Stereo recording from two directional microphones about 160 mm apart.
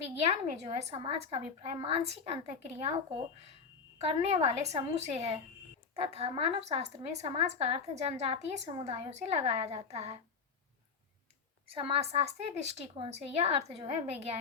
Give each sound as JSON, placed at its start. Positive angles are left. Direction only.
{"t": 0.2, "sound": "a woman's voice", "side_deg": -40}
{"t": 11.7, "sound": "a woman's voice", "side_deg": -35}